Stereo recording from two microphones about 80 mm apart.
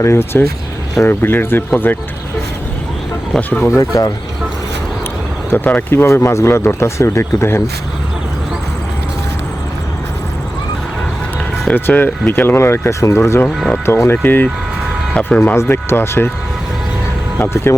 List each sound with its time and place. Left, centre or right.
0.0 s speech: left
3.3 s speech: centre
3.8 s speech: left
5.5 s speech: left
11.7 s speech: left
13.5 s speech: centre
13.8 s speech: left
17.4 s speech: left